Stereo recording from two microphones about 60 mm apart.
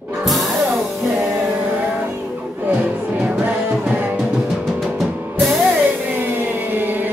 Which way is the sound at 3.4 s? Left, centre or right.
Right.